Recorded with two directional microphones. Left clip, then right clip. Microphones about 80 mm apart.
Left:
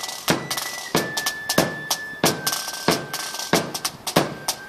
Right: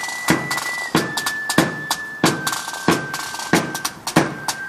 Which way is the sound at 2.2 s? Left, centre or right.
Left.